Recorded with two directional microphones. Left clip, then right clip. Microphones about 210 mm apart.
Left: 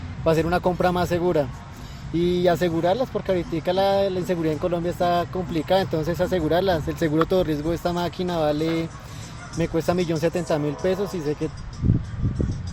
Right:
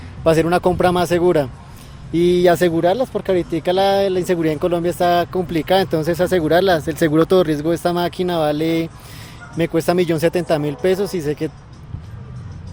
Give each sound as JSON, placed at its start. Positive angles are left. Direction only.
{"t": 0.3, "sound": "speech", "side_deg": -55}